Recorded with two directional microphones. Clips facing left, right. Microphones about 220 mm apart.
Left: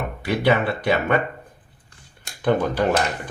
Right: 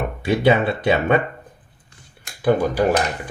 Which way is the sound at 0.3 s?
25° right (ahead or behind).